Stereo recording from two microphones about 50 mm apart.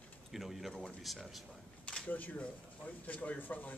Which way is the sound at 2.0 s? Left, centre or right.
Left.